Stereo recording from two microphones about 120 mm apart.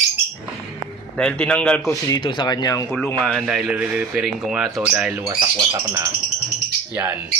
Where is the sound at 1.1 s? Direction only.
10° left (ahead or behind).